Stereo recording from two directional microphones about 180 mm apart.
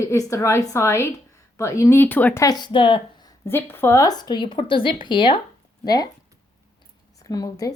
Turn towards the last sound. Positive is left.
turn(degrees=20)  # may be behind; listen again after turning